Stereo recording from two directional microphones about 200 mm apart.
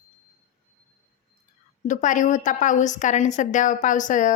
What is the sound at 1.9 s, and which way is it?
Speech, 40° left (ahead or behind).